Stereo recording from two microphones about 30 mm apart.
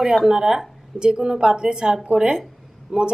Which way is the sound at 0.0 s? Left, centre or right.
Centre.